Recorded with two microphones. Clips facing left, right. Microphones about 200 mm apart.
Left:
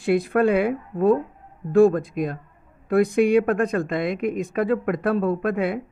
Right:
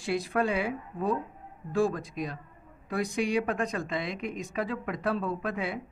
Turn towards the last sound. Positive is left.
turn(degrees=55)  # may be behind; listen again after turning